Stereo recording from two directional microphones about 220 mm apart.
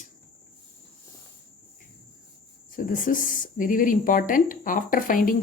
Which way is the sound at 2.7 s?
35° left (ahead or behind).